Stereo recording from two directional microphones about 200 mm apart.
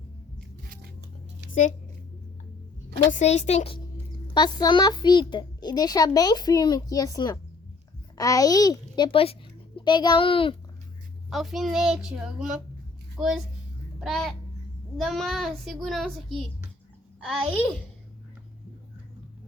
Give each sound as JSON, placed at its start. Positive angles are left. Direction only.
{"t": 3.1, "sound": "a woman's voice", "side_deg": 35}
{"t": 4.4, "sound": "a child's voice", "side_deg": 20}
{"t": 11.3, "sound": "a child's voice", "side_deg": 0}
{"t": 17.2, "sound": "a child's voice", "side_deg": 5}